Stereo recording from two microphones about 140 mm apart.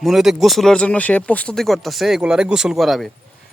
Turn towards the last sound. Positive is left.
turn(degrees=0)  # may be behind; listen again after turning